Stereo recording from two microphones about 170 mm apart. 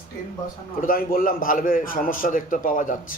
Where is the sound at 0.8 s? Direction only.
55° left (ahead or behind).